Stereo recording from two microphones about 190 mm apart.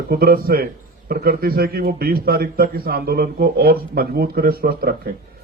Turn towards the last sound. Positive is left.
turn(degrees=-55)  # may be behind; listen again after turning